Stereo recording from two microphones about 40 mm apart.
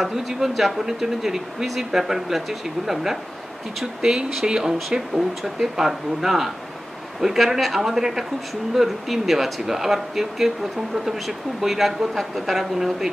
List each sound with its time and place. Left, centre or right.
0.0 s speech: centre
5.4 s speech: centre